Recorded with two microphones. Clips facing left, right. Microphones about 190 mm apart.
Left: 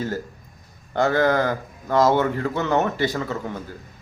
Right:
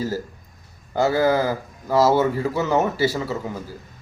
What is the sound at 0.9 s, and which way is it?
A man's voice, 5° right (ahead or behind).